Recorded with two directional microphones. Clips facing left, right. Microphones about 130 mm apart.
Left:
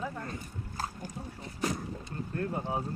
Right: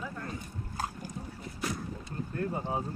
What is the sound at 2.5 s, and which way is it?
Speech, centre (ahead or behind).